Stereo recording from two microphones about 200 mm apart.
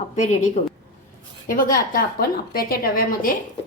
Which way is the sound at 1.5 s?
45° left (ahead or behind).